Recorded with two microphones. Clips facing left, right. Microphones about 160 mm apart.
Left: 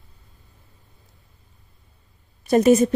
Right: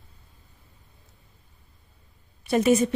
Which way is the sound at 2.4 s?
40° left (ahead or behind).